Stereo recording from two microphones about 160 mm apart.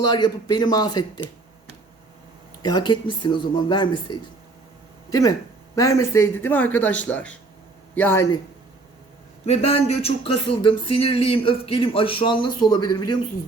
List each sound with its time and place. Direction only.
0.0 s a man's voice: 25° left (ahead or behind)
2.6 s a man's voice: 25° left (ahead or behind)
5.7 s speech: 20° left (ahead or behind)
9.5 s speech: 40° left (ahead or behind); by 13.1 s 25° left (ahead or behind)